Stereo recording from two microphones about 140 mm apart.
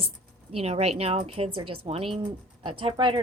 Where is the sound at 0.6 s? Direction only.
50° right (ahead or behind).